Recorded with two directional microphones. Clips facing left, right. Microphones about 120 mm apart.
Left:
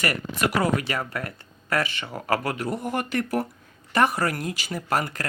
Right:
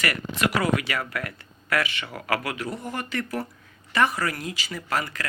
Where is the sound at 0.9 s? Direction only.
35° left (ahead or behind).